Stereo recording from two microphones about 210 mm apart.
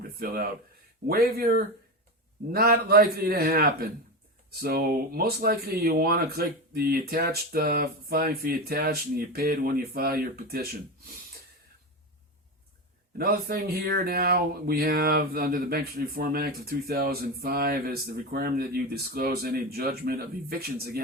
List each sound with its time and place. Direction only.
0.2 s speech: 45° right (ahead or behind)
13.1 s speech: 45° right (ahead or behind)